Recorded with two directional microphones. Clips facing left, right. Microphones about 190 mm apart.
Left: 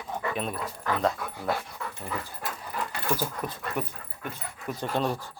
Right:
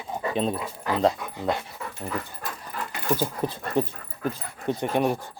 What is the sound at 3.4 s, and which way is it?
Speech, 30° right (ahead or behind).